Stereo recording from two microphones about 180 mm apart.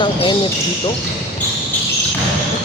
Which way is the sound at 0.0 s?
25° left (ahead or behind).